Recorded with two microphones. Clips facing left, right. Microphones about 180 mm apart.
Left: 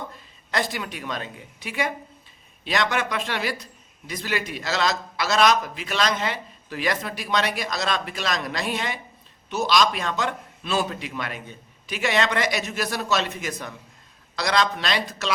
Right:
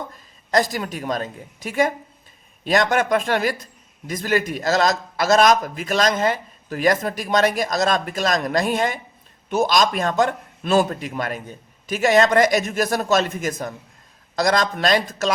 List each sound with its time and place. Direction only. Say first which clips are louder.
0.5 s a man's voice: right 7 dB; 40° right (ahead or behind)